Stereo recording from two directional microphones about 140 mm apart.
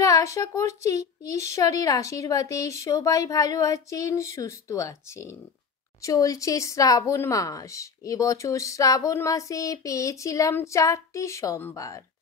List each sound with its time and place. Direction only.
0.0 s a woman's voice: 20° left (ahead or behind)